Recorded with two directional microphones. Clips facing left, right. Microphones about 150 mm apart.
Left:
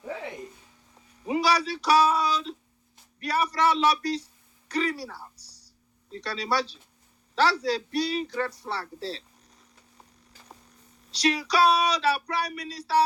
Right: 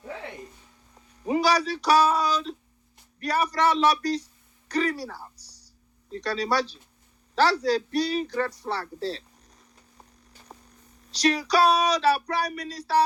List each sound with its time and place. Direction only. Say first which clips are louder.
1.3 s speech: right 2 dB; 40° right (ahead or behind)
11.1 s speech: right 2 dB; 40° right (ahead or behind)